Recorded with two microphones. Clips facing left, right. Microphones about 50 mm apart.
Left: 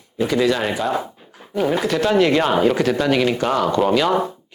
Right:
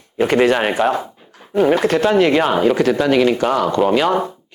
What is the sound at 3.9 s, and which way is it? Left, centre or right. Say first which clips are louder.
Speech: right 2 dB; right.